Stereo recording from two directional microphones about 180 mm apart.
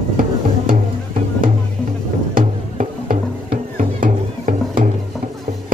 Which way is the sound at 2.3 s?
50° right (ahead or behind).